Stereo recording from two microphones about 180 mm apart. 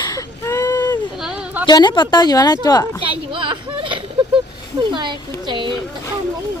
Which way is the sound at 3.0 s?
30° right (ahead or behind).